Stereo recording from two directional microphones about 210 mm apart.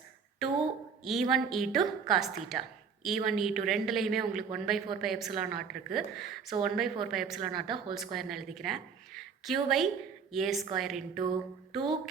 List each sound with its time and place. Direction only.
1.0 s a woman's voice: centre (ahead or behind)
11.7 s music: centre (ahead or behind)